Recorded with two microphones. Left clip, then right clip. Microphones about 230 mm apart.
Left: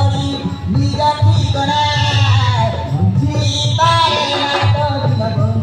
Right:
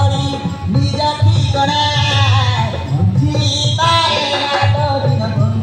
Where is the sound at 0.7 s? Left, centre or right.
Right.